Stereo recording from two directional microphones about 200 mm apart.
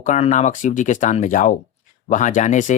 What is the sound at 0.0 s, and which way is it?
Speech, 40° left (ahead or behind).